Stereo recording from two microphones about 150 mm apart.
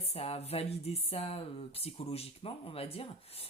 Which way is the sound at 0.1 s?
45° left (ahead or behind).